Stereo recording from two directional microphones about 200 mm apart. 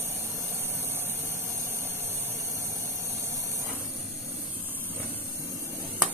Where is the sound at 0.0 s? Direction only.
10° right (ahead or behind).